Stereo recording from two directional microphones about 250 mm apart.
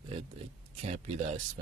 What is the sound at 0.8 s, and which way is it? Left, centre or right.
Speech, right.